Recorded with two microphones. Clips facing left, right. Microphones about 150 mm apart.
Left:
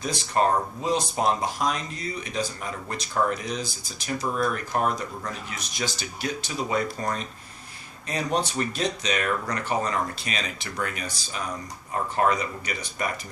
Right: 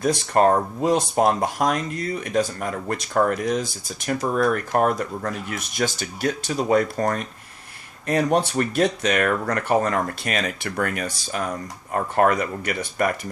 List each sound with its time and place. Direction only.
0.0 s speech: 50° right (ahead or behind)